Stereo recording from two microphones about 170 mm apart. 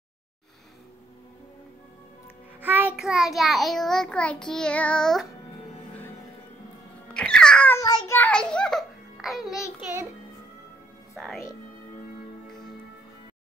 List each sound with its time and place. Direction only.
2.6 s music: 10° right (ahead or behind)
3.0 s child singing: centre (ahead or behind)
7.2 s music: 5° left (ahead or behind)
7.8 s child singing: 20° left (ahead or behind)
8.2 s a child's voice: 5° left (ahead or behind)
11.1 s child singing: centre (ahead or behind)